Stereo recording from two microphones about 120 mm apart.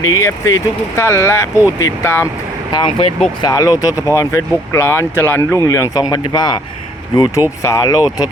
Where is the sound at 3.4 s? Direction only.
30° left (ahead or behind).